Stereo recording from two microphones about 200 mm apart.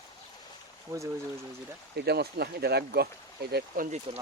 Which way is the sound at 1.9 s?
55° right (ahead or behind).